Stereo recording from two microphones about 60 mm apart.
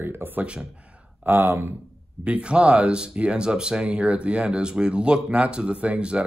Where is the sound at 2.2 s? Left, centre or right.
Right.